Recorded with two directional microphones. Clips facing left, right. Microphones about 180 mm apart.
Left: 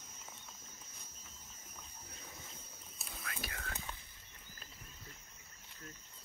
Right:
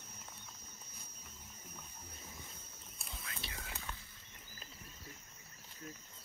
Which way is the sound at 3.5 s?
15° right (ahead or behind).